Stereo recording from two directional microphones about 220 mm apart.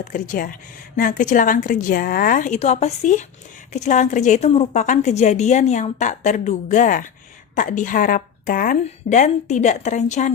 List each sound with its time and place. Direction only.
0.0 s a woman's voice: 35° left (ahead or behind)